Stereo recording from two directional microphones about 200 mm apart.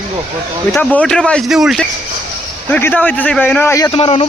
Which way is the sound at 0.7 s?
5° left (ahead or behind).